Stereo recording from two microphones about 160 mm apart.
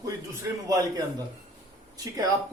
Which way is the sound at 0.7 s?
25° right (ahead or behind).